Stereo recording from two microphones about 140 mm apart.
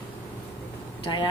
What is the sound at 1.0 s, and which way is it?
Speech, 35° left (ahead or behind).